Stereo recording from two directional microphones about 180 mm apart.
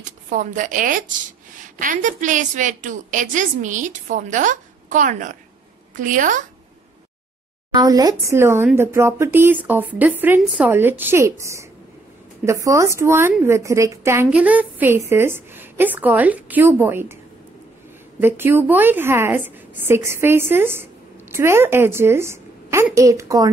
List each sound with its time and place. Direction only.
0.0 s a woman's voice: 45° right (ahead or behind)
7.7 s a woman's voice: 20° right (ahead or behind)
18.2 s a woman's voice: 10° right (ahead or behind)